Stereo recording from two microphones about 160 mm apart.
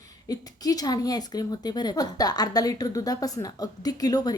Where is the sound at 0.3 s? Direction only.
25° left (ahead or behind).